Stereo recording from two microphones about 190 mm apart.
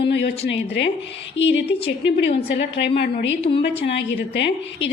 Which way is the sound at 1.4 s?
70° left (ahead or behind).